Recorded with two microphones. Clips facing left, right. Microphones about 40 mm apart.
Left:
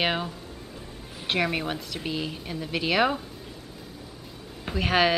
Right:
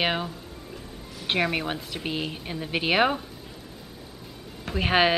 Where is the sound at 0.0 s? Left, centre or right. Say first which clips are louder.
Even; centre; by 3.2 s right.